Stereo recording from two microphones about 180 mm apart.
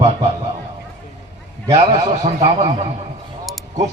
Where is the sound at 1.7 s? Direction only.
40° right (ahead or behind).